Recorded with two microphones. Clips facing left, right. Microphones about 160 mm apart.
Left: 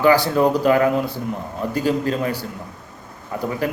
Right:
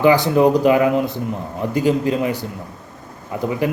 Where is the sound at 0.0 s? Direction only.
20° right (ahead or behind).